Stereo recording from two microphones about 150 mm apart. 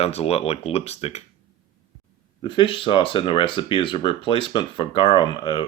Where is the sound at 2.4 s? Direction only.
30° left (ahead or behind).